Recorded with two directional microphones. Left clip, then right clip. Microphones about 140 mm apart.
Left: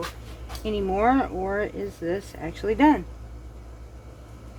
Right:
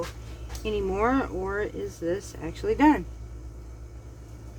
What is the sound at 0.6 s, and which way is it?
Speech, 20° left (ahead or behind).